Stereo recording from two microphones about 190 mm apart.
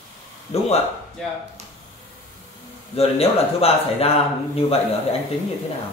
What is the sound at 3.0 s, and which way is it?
Speech, 30° left (ahead or behind).